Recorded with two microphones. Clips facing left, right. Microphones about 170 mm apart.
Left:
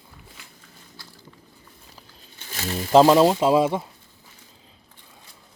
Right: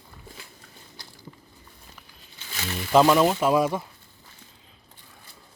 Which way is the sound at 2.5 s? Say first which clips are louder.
Left 4 dB; 40° left (ahead or behind).